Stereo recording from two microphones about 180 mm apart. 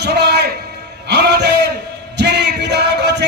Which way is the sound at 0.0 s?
65° right (ahead or behind).